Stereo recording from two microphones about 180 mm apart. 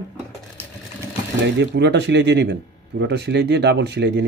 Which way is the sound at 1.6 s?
70° right (ahead or behind).